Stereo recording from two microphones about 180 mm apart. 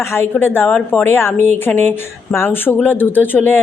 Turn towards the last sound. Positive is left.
turn(degrees=10)  # may be behind; listen again after turning